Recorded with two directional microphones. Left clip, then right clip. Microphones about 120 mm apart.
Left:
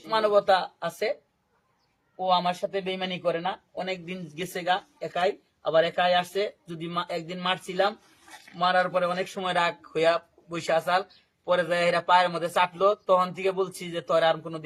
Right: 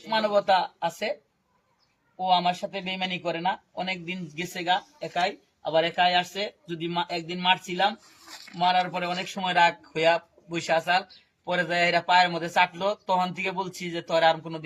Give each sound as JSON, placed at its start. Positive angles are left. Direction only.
{"t": 0.1, "sound": "a man's voice", "side_deg": 25}
{"t": 2.1, "sound": "a man's voice", "side_deg": 25}